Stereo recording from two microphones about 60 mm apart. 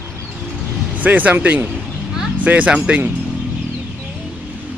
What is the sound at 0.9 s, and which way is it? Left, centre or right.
Speech, right.